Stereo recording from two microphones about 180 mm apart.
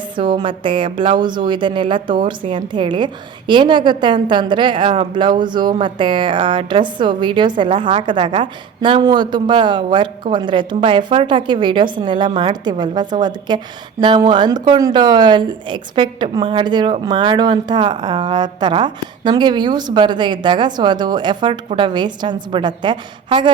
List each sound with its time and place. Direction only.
0.3 s a woman's voice: 25° right (ahead or behind)